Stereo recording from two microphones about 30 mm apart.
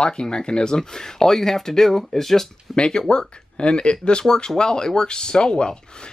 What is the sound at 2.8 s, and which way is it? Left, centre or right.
Speech, left.